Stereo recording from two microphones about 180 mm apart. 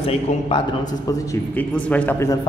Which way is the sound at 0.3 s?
40° left (ahead or behind).